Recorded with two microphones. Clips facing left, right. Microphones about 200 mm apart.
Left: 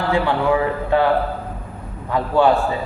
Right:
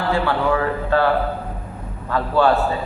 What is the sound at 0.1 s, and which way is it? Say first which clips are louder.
Speech: left 1 dB; 15° left (ahead or behind).